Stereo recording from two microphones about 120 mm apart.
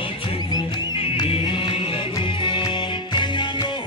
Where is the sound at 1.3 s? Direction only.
50° left (ahead or behind).